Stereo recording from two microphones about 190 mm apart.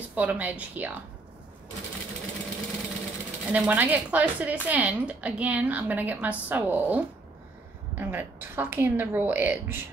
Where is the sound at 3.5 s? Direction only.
10° right (ahead or behind).